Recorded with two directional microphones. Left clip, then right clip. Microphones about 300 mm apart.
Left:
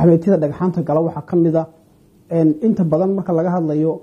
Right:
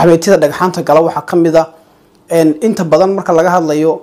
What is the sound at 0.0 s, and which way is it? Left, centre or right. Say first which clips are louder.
Speech: right 7 dB; centre.